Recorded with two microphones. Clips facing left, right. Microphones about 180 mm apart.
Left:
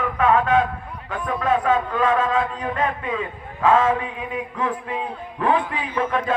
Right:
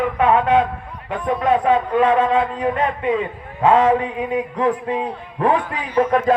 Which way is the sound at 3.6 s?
30° right (ahead or behind).